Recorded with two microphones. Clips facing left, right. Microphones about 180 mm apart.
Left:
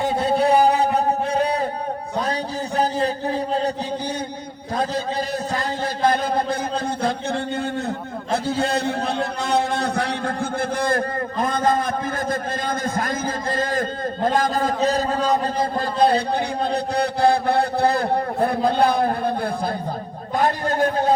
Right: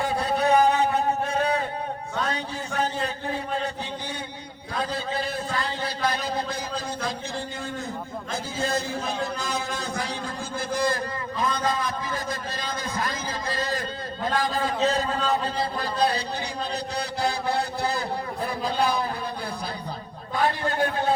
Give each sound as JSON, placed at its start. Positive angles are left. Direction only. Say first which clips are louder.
{"t": 0.0, "sound": "a sound", "louder": "left 5 dB", "side_deg": 25}
{"t": 5.5, "sound": "speech", "louder": "left 5 dB", "side_deg": 50}
{"t": 8.3, "sound": "a man's voice", "louder": "left 7 dB", "side_deg": 65}
{"t": 20.3, "sound": "speech", "louder": "left 4 dB", "side_deg": 40}